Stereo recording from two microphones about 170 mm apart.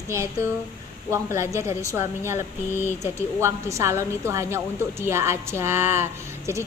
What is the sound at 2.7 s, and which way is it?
Speech, 15° left (ahead or behind).